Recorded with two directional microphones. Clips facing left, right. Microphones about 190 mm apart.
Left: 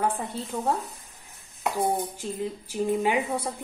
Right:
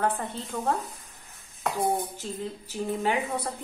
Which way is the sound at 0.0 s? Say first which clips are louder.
Left 1 dB; 10° left (ahead or behind).